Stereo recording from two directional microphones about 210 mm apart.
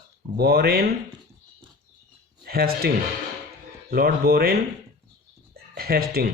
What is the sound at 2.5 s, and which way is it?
Speech, 45° right (ahead or behind).